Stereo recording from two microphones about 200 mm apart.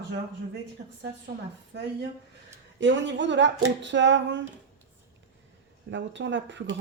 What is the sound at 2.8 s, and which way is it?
Speech, 65° right (ahead or behind).